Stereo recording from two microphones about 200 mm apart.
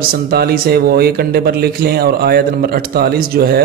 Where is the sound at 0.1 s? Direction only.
50° right (ahead or behind).